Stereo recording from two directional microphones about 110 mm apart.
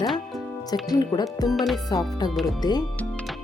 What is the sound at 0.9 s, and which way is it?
Speech, 35° left (ahead or behind).